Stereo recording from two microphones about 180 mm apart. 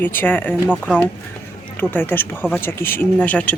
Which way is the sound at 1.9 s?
10° left (ahead or behind).